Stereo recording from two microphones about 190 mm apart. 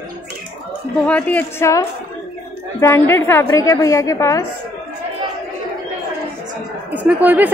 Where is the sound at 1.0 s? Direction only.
10° left (ahead or behind).